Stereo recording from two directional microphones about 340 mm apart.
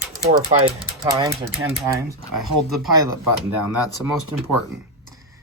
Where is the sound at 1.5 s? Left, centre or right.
Centre.